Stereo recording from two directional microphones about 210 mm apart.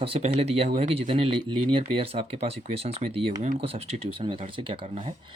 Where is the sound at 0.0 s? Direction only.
30° right (ahead or behind).